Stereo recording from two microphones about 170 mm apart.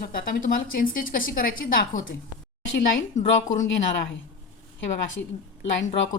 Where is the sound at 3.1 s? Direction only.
50° left (ahead or behind).